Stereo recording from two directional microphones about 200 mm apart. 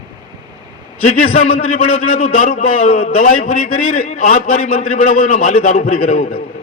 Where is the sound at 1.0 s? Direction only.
35° left (ahead or behind).